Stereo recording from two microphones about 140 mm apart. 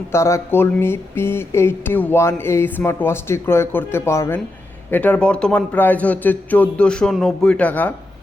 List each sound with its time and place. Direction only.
0.1 s speech: 20° left (ahead or behind)